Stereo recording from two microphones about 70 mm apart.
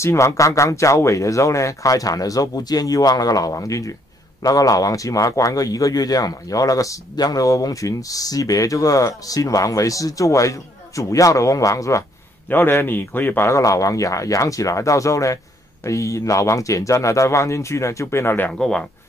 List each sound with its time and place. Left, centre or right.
0.0 s a man's voice: left
12.4 s speech: left
13.5 s speech: left
18.5 s speech: centre